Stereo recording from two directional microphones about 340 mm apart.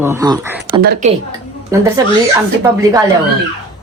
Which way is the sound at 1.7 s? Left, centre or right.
Centre.